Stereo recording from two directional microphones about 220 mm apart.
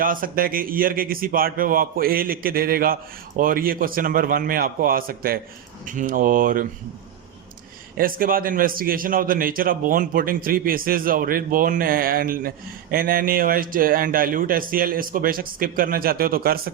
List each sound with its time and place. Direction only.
0.0 s a man's voice: 40° right (ahead or behind)
7.9 s a man's voice: 40° right (ahead or behind)